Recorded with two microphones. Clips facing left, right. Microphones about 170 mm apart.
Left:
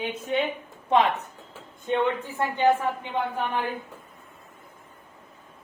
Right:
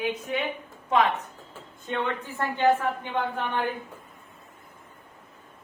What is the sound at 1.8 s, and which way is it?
A woman's voice, 15° left (ahead or behind).